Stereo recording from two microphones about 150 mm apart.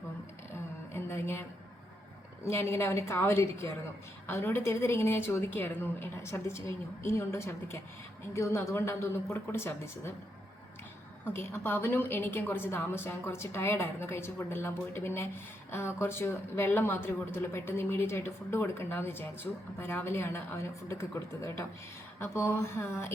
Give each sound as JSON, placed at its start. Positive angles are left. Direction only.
{"t": 0.9, "sound": "a sound", "side_deg": 15}
{"t": 2.4, "sound": "speech", "side_deg": 15}
{"t": 11.3, "sound": "speech", "side_deg": 15}